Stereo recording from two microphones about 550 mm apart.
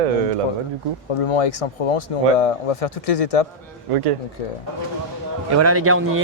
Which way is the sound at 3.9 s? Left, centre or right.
Right.